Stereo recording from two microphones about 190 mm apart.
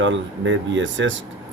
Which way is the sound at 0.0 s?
80° right.